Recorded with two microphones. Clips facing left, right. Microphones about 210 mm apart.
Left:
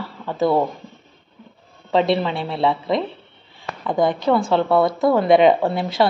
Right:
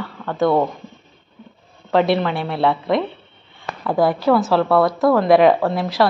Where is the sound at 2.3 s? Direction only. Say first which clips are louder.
Right 1 dB; centre (ahead or behind).